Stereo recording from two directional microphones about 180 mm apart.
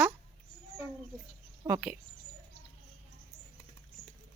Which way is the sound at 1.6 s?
20° right (ahead or behind).